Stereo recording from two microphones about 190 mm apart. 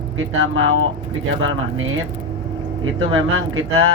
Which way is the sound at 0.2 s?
90° right.